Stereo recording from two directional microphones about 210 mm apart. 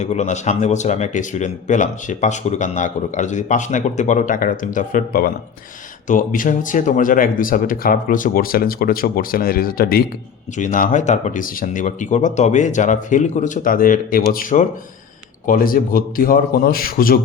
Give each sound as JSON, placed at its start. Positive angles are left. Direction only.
{"t": 0.0, "sound": "a man's voice", "side_deg": 35}